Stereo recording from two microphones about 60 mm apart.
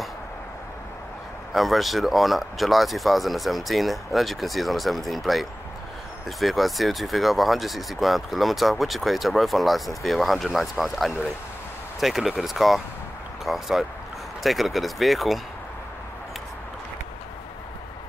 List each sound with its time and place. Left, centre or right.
1.5 s speech: centre